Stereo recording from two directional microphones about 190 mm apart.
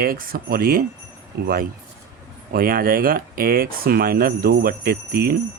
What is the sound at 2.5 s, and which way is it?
Speech, 50° right (ahead or behind).